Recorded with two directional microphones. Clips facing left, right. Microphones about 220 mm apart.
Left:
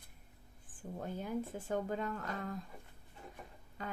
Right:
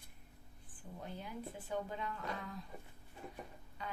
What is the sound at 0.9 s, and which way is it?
A woman's voice, 45° left (ahead or behind).